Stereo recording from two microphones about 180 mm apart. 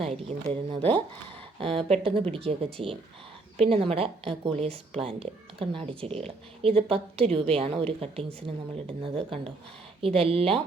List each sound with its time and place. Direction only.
0.3 s speech: 35° right (ahead or behind)